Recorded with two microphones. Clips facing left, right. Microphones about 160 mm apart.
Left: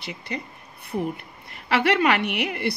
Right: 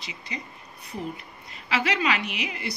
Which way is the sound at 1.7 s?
65° left (ahead or behind).